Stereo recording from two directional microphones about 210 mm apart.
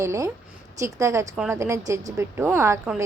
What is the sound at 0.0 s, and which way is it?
A woman's voice, 15° right (ahead or behind).